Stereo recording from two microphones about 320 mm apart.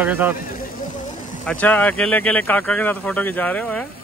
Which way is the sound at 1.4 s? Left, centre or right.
Centre.